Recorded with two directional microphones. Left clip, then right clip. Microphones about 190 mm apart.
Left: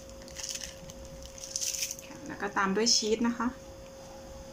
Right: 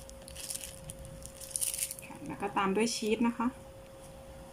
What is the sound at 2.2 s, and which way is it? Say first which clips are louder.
Speech: left 2 dB; 15° right (ahead or behind).